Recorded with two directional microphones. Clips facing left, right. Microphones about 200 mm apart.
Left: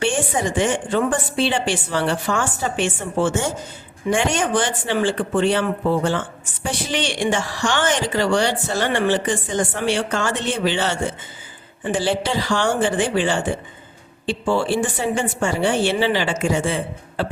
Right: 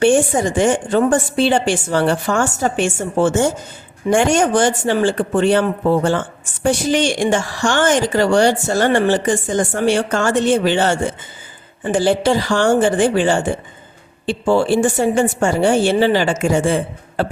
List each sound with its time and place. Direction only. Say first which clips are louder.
0.0 s speech: right 7 dB; 45° right (ahead or behind)